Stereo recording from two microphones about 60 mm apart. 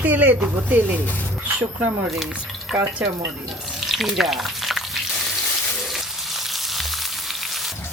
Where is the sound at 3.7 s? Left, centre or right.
Centre.